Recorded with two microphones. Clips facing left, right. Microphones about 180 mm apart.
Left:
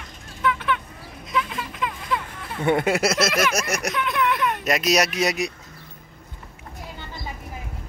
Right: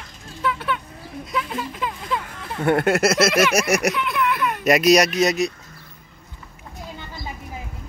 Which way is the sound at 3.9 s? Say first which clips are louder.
Even; 5° right (ahead or behind).